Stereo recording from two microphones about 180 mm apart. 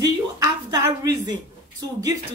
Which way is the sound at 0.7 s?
20° right (ahead or behind).